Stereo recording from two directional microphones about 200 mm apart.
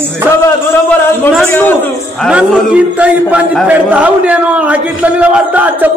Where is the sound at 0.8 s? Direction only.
5° left (ahead or behind).